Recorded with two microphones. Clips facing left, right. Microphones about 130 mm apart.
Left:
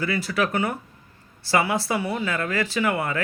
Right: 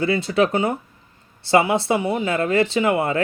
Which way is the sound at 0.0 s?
25° right (ahead or behind).